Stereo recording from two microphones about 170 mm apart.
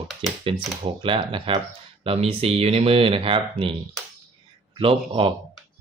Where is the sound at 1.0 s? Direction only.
30° right (ahead or behind).